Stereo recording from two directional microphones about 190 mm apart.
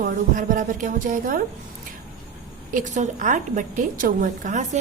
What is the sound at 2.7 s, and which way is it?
A woman's voice, 40° right (ahead or behind).